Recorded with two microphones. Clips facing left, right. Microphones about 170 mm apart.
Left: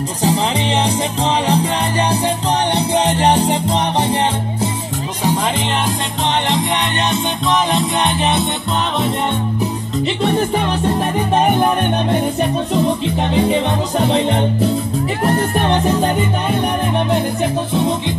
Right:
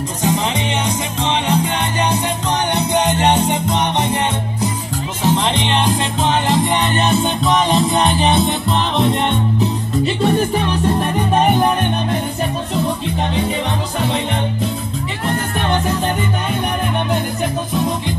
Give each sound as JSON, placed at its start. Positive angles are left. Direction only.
{"t": 0.8, "sound": "music", "side_deg": 35}
{"t": 5.2, "sound": "music", "side_deg": 5}
{"t": 7.7, "sound": "music", "side_deg": 0}